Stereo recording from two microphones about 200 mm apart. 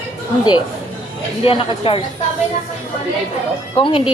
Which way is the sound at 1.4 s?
25° left (ahead or behind).